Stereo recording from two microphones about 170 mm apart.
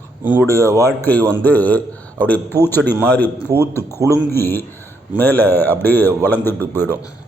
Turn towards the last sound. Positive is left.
turn(degrees=15)  # may be behind; listen again after turning